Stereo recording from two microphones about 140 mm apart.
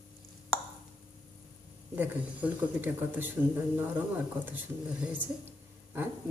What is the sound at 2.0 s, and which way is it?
Speech, 15° right (ahead or behind).